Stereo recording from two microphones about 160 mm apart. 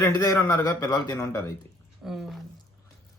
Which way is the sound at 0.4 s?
20° left (ahead or behind).